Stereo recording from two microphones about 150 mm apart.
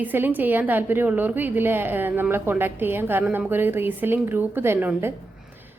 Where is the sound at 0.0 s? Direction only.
10° right (ahead or behind).